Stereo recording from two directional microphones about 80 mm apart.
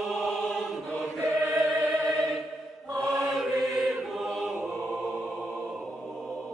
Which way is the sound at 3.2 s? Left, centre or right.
Centre.